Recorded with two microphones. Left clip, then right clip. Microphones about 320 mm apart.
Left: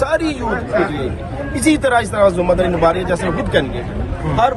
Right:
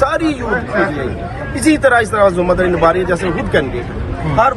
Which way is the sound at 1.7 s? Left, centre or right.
Centre.